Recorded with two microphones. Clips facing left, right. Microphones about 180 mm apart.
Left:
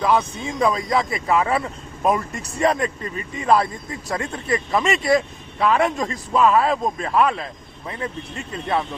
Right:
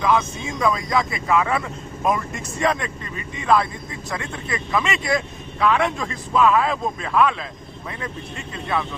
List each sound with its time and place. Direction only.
0.0 s speech: 35° left (ahead or behind)